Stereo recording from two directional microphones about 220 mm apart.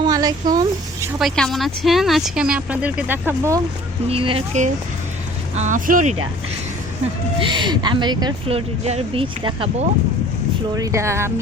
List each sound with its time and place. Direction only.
0.0 s a sound: 15° right (ahead or behind)
1.2 s speech: centre (ahead or behind)
4.1 s speech: 25° right (ahead or behind)
7.3 s speech: 20° right (ahead or behind)
10.8 s speech: 15° right (ahead or behind)